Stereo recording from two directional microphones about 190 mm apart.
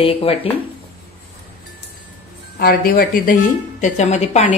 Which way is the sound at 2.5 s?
50° left (ahead or behind).